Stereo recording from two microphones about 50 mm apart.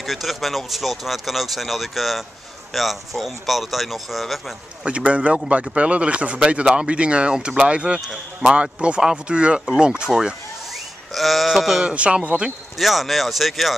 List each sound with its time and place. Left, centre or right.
0.0 s speech: centre
4.8 s speech: right
11.1 s speech: centre
11.9 s speech: right
12.7 s speech: centre